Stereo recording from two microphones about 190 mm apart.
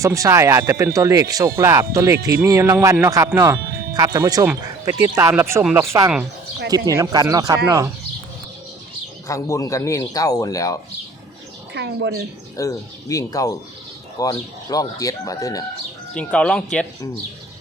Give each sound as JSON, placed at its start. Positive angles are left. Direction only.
{"t": 0.0, "sound": "speech", "side_deg": -15}
{"t": 9.2, "sound": "speech", "side_deg": 15}
{"t": 11.7, "sound": "speech", "side_deg": -65}
{"t": 12.5, "sound": "speech", "side_deg": 15}
{"t": 16.1, "sound": "speech", "side_deg": 5}